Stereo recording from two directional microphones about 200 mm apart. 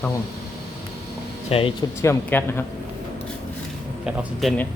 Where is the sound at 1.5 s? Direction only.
30° left (ahead or behind).